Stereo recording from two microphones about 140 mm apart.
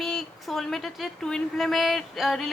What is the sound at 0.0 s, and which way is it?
A woman's voice, centre (ahead or behind).